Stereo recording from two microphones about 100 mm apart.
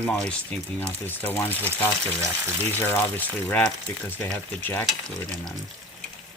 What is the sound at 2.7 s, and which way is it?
Speech, 20° left (ahead or behind).